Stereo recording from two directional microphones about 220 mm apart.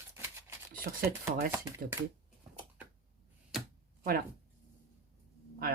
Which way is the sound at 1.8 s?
45° right (ahead or behind).